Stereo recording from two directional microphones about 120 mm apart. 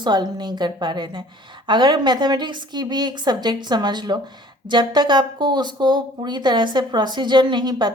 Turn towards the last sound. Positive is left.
turn(degrees=-35)  # may be behind; listen again after turning